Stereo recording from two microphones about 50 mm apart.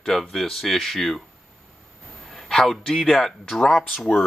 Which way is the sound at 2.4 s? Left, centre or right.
Centre.